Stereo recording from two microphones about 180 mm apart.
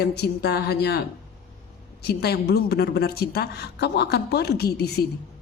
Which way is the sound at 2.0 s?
65° left (ahead or behind).